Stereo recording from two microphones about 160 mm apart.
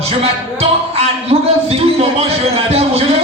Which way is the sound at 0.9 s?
40° right (ahead or behind).